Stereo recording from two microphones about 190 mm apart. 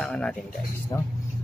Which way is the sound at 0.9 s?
20° left (ahead or behind).